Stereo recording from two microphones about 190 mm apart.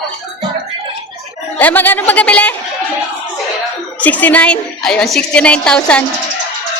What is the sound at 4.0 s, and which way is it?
A woman's voice, 10° left (ahead or behind).